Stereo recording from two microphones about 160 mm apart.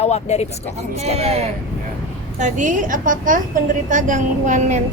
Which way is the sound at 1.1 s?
40° right (ahead or behind).